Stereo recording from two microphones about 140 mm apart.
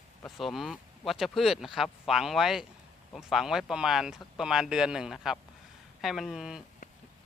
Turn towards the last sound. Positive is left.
turn(degrees=-5)  # may be behind; listen again after turning